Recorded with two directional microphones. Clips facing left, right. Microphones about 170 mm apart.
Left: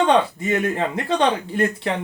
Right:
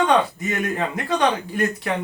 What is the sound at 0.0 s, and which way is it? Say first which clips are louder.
Speech: left 1 dB; 30° left (ahead or behind).